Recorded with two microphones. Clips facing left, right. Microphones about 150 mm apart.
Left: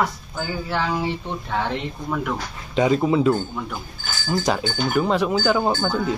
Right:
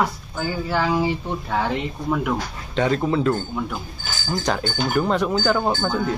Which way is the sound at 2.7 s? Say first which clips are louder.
Left 2 dB; 10° left (ahead or behind).